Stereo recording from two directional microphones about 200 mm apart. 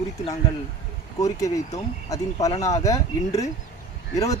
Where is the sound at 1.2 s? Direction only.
15° left (ahead or behind).